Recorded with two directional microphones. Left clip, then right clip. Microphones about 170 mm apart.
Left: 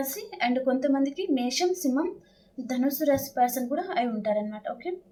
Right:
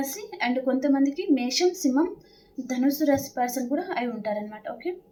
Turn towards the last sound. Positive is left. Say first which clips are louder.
# even
turn(degrees=15)  # may be behind; listen again after turning